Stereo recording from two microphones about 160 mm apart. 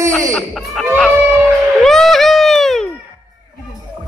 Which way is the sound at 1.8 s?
Centre (ahead or behind).